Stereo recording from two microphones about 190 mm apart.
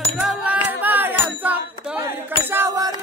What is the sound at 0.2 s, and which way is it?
Music, 10° right (ahead or behind).